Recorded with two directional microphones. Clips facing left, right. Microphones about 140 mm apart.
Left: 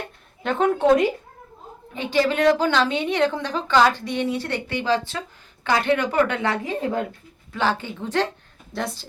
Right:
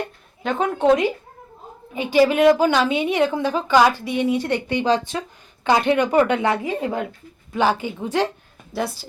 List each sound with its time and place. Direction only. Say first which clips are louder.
0.4 s a woman's voice: even; centre (ahead or behind)
1.9 s a woman's voice: right 5 dB; 10° right (ahead or behind)